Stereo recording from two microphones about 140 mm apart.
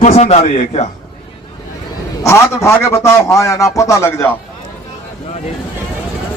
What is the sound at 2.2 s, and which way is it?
A man's voice, 20° left (ahead or behind).